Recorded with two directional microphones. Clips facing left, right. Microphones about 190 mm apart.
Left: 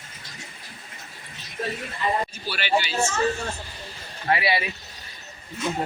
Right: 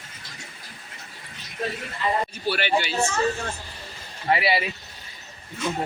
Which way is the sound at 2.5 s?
55° right (ahead or behind).